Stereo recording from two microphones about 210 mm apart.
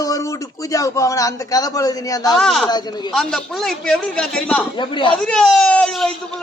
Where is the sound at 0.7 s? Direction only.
15° left (ahead or behind).